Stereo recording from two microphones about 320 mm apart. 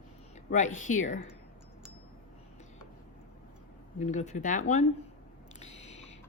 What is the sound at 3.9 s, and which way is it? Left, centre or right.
A woman's voice, left.